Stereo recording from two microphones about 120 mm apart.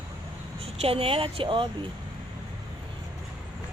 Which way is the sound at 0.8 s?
55° right (ahead or behind).